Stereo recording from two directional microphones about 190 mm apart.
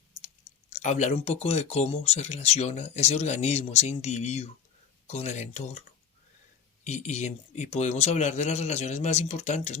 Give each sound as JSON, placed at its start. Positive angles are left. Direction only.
{"t": 0.7, "sound": "speech", "side_deg": 35}
{"t": 6.8, "sound": "speech", "side_deg": 35}